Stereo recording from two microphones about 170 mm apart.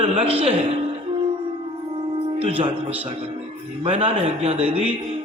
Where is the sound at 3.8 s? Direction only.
35° right (ahead or behind).